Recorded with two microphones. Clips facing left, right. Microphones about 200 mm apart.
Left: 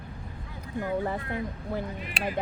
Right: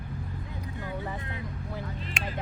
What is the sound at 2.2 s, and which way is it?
Speech, 35° left (ahead or behind).